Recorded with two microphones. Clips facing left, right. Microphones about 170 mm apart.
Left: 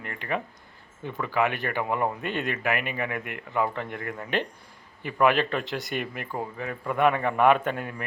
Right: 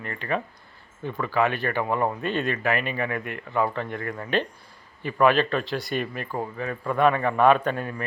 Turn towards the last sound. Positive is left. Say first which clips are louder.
# right 2 dB
turn(degrees=15)  # may be behind; listen again after turning